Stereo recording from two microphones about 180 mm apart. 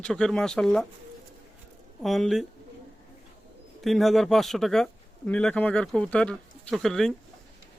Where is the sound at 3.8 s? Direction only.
Centre (ahead or behind).